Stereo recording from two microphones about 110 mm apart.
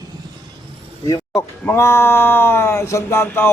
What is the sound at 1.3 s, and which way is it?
Speech, 20° left (ahead or behind).